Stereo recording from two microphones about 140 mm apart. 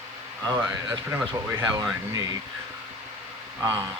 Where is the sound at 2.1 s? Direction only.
25° right (ahead or behind).